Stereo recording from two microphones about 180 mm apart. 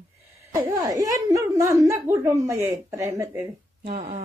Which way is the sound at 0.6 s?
20° right (ahead or behind).